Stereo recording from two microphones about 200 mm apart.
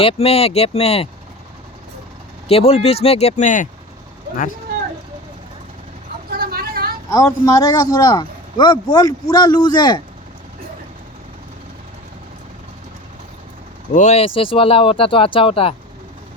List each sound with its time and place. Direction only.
0.0 s speech: 30° left (ahead or behind)
2.5 s speech: 30° left (ahead or behind)
6.3 s vehicle: 50° right (ahead or behind)
7.1 s a man's voice: 15° left (ahead or behind)
13.9 s a man's voice: 35° left (ahead or behind)